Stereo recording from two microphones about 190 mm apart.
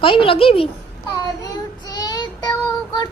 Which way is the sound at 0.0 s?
25° left (ahead or behind).